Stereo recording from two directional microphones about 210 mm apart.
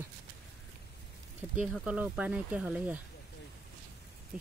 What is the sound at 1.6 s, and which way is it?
Speech, 5° right (ahead or behind).